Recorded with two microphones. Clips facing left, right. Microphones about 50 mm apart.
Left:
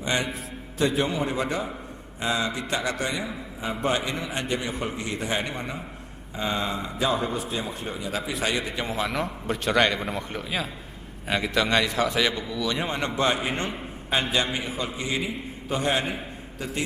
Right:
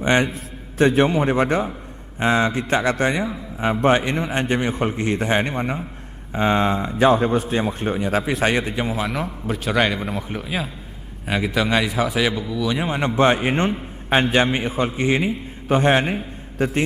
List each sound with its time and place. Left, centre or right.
0.0 s a man's voice: right
8.9 s a man's voice: centre
13.1 s a man's voice: right